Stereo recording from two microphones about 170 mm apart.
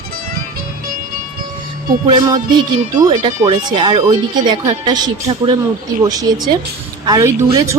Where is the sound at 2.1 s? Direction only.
25° right (ahead or behind).